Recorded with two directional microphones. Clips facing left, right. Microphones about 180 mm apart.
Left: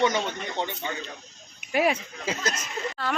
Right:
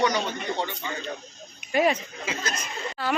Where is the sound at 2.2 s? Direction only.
40° left (ahead or behind).